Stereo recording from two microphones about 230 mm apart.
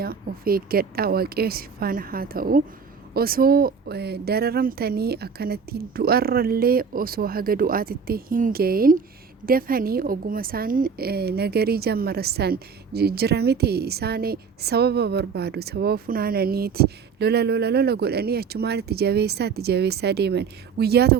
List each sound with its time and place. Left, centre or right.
0.0 s a woman's voice: right